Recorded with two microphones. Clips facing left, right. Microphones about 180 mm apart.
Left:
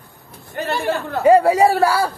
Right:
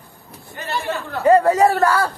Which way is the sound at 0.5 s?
55° left (ahead or behind).